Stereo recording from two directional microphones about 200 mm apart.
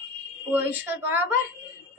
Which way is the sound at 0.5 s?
10° right (ahead or behind).